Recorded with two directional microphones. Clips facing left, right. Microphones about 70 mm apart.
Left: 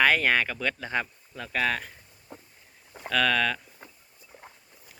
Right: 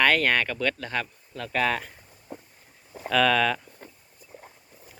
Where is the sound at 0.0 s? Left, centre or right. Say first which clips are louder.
Even; centre.